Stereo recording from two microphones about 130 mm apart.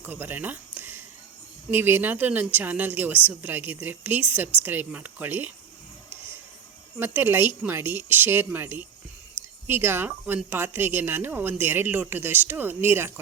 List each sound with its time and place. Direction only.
0.0 s a woman's voice: 15° right (ahead or behind)
7.0 s a woman's voice: 15° right (ahead or behind)